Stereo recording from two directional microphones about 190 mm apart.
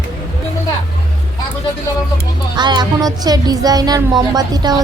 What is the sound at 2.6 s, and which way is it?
Speech, 20° right (ahead or behind).